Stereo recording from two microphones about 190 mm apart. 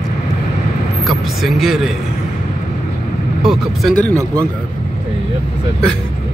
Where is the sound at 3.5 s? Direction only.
Centre (ahead or behind).